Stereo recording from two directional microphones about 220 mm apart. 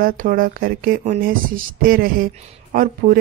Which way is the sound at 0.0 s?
40° right (ahead or behind).